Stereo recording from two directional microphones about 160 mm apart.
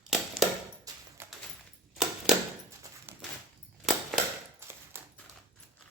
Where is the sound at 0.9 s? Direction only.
25° right (ahead or behind).